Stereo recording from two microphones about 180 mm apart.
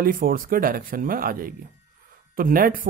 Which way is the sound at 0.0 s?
50° right (ahead or behind).